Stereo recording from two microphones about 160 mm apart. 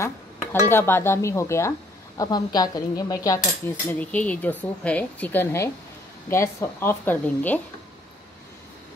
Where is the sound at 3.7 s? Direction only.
10° left (ahead or behind).